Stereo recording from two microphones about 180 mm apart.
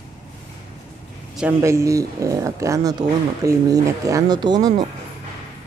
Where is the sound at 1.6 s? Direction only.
15° right (ahead or behind).